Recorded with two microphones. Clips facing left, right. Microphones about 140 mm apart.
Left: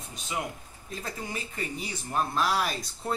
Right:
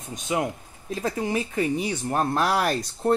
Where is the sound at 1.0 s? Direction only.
80° right.